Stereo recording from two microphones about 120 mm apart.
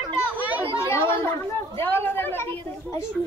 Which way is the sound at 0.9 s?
20° left (ahead or behind).